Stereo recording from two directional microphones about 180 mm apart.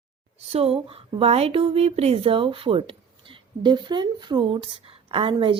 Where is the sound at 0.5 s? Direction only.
35° right (ahead or behind).